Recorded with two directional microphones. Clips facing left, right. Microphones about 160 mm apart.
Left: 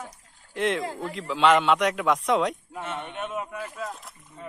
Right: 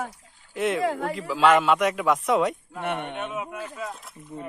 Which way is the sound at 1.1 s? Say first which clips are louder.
Even; 5° right (ahead or behind).